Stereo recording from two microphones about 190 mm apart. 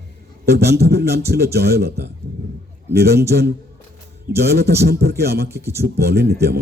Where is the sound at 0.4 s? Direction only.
55° right (ahead or behind).